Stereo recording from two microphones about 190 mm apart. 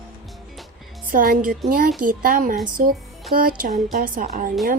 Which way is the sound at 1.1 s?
50° right (ahead or behind).